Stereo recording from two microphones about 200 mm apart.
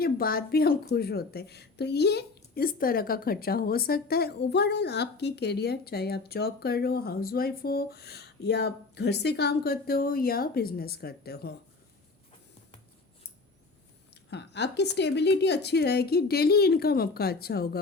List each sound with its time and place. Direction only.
0.0 s a woman's voice: 50° left (ahead or behind)
14.3 s a woman's voice: 60° left (ahead or behind)